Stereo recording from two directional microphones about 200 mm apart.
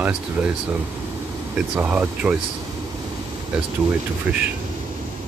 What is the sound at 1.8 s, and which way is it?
Speech, 10° right (ahead or behind).